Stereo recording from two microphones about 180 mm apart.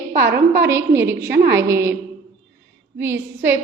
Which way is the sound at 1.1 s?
65° right (ahead or behind).